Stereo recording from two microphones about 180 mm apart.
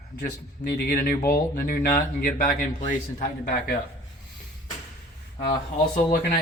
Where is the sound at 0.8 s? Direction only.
55° left (ahead or behind).